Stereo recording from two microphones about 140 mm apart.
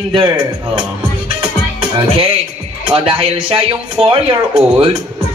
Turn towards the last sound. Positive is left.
turn(degrees=-40)  # may be behind; listen again after turning